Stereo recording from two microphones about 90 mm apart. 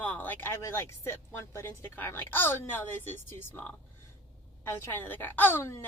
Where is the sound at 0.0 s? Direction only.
15° left (ahead or behind).